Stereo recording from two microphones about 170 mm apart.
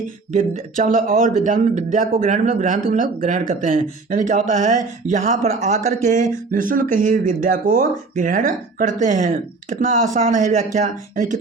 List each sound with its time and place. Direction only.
0.3 s speech: 50° right (ahead or behind)